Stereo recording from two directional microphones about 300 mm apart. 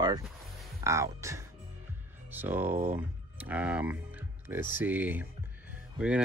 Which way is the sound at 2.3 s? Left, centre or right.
Centre.